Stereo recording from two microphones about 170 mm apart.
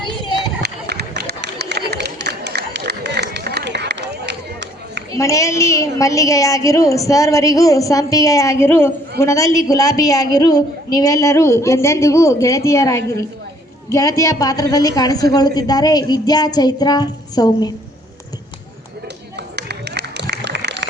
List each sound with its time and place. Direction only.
0.0 s children playing: 30° left (ahead or behind)
0.6 s run: 75° right (ahead or behind)
5.1 s a woman's voice: 20° left (ahead or behind)
19.4 s a sound: 75° right (ahead or behind)